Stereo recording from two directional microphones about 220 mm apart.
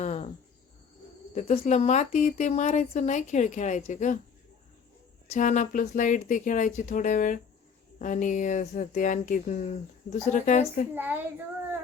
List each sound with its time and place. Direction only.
0.0 s a sound: 30° left (ahead or behind)
1.4 s speech: 30° left (ahead or behind)
5.3 s speech: 35° left (ahead or behind)
10.9 s a child's voice: 10° right (ahead or behind)